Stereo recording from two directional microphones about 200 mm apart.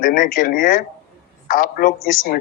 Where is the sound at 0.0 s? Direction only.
45° left (ahead or behind).